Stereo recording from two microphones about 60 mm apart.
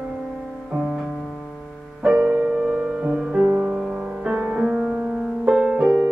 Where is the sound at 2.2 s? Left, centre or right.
Right.